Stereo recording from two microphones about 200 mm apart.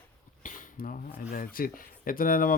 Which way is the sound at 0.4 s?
40° left (ahead or behind).